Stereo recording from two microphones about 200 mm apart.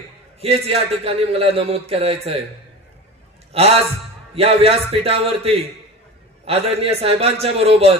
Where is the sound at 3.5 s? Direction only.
30° right (ahead or behind).